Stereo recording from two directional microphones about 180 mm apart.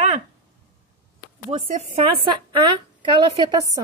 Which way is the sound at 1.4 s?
35° right (ahead or behind).